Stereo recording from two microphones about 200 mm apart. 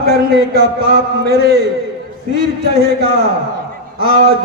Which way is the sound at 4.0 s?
50° right (ahead or behind).